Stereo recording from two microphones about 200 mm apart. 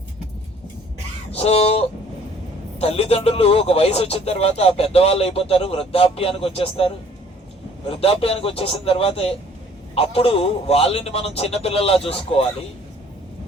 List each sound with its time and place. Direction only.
1.3 s speech: 30° left (ahead or behind)
2.8 s speech: 30° left (ahead or behind)